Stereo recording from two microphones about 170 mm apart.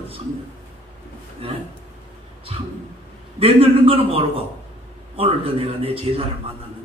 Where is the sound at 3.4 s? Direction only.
35° right (ahead or behind).